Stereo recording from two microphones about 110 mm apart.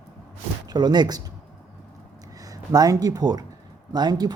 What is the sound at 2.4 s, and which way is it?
Speech, 35° right (ahead or behind).